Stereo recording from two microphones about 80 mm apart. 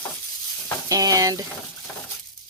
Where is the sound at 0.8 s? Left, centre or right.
Right.